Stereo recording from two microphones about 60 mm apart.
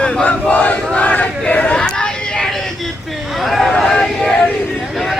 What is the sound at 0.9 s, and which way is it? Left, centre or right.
Crowd, left.